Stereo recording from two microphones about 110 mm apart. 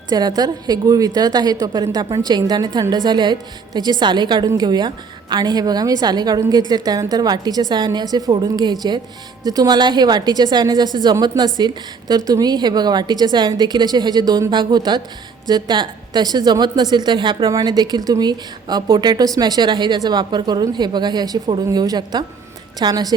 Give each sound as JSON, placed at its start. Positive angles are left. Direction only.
{"t": 0.1, "sound": "a woman's voice", "side_deg": -35}